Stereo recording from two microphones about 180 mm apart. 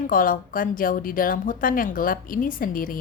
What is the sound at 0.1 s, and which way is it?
Speech, 50° left (ahead or behind).